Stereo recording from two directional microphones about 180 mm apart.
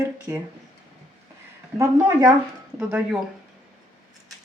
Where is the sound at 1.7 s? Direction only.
20° right (ahead or behind).